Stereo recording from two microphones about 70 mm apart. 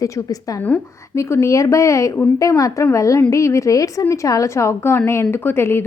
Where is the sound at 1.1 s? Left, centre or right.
Left.